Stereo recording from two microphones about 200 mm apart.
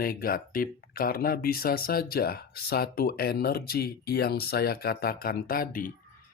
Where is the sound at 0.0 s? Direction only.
45° left (ahead or behind).